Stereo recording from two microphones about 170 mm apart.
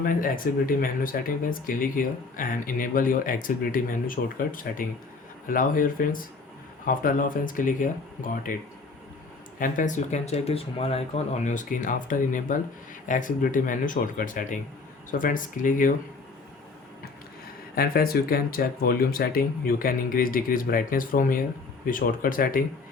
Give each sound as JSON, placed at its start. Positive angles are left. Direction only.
{"t": 0.0, "sound": "speech", "side_deg": 55}
{"t": 9.6, "sound": "speech", "side_deg": 50}
{"t": 17.7, "sound": "speech", "side_deg": 60}